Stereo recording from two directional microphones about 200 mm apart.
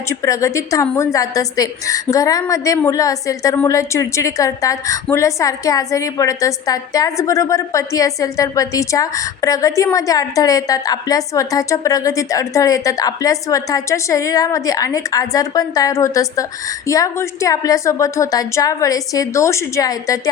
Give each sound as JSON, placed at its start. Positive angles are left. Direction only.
{"t": 0.1, "sound": "a woman's voice", "side_deg": 15}